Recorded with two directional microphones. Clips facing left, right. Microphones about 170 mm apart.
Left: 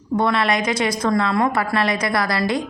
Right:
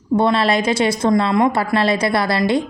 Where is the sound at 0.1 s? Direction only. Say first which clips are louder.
Right 3 dB; 25° right (ahead or behind).